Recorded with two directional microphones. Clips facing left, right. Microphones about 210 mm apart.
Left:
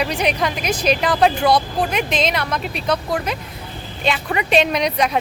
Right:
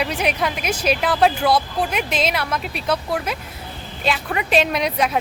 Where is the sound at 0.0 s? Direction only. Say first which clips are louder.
Left 2 dB; 5° right (ahead or behind).